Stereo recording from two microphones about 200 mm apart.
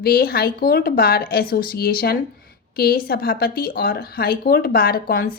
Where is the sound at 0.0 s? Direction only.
50° left (ahead or behind).